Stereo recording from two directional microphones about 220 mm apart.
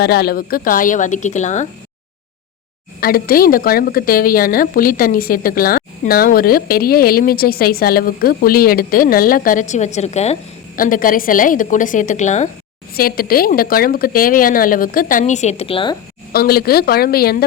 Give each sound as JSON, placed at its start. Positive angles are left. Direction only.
{"t": 0.0, "sound": "a woman's voice", "side_deg": 45}
{"t": 3.0, "sound": "a woman's voice", "side_deg": 40}
{"t": 16.3, "sound": "speech", "side_deg": 45}